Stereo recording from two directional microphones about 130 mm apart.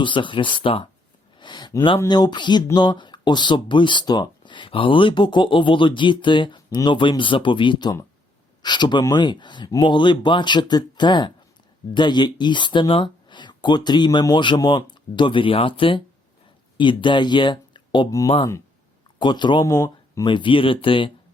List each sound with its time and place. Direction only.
0.0 s speech: 40° left (ahead or behind)
1.4 s a sound: 35° left (ahead or behind)
2.0 s speech: 35° left (ahead or behind)
19.2 s speech: 35° left (ahead or behind)
19.6 s speech: 25° left (ahead or behind)
20.2 s speech: 40° left (ahead or behind)